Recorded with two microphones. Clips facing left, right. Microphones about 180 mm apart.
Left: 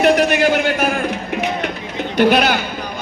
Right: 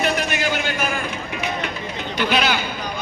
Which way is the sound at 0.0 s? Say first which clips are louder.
Left 9 dB; 65° left (ahead or behind).